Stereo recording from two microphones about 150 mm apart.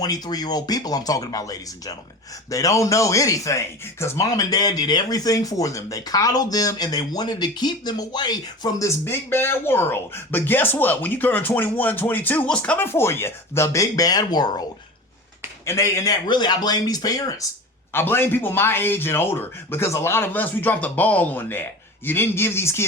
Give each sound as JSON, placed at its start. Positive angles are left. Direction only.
{"t": 0.0, "sound": "speech", "side_deg": 25}
{"t": 9.0, "sound": "speech", "side_deg": 15}
{"t": 15.6, "sound": "speech", "side_deg": 20}
{"t": 17.9, "sound": "speech", "side_deg": 15}